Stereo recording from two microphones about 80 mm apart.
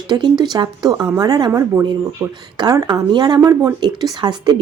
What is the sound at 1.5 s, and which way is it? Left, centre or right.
Speech, right.